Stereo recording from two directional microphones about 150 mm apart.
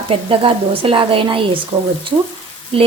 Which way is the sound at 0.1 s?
35° right (ahead or behind).